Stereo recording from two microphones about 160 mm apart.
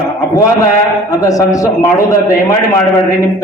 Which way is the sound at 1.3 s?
20° left (ahead or behind).